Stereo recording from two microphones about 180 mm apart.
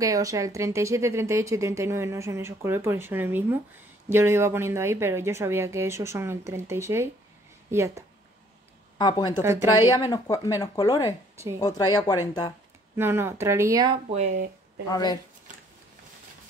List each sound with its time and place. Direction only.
0.0 s speech: 20° right (ahead or behind)
8.9 s speech: 25° left (ahead or behind)
9.4 s speech: 15° right (ahead or behind)
9.8 s speech: 20° left (ahead or behind)
12.9 s speech: 15° right (ahead or behind)
14.1 s speech: 40° right (ahead or behind)
14.9 s speech: 20° left (ahead or behind)